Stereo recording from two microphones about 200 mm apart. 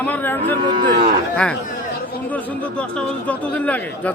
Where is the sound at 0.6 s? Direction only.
25° right (ahead or behind).